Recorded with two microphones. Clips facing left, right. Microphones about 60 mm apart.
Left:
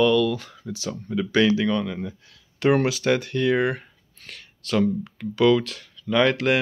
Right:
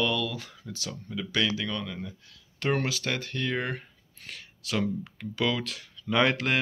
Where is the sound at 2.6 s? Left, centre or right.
Centre.